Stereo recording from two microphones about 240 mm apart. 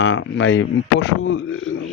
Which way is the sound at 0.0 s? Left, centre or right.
Left.